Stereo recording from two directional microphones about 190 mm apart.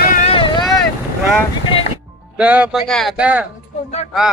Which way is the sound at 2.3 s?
5° right (ahead or behind).